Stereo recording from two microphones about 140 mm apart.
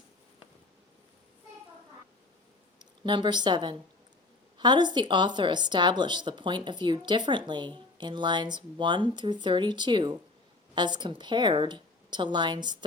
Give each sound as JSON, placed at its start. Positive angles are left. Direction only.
{"t": 2.7, "sound": "a woman's voice", "side_deg": -35}